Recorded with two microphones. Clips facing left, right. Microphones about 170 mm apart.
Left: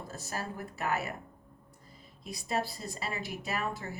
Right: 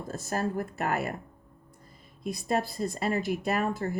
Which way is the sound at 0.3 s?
50° right (ahead or behind).